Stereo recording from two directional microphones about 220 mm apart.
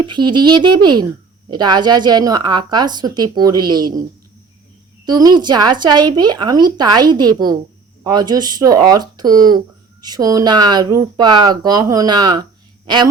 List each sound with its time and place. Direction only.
0.0 s speech: 20° right (ahead or behind)
5.0 s speech: 15° right (ahead or behind)
9.3 s speech: 40° right (ahead or behind)
10.0 s speech: 15° right (ahead or behind)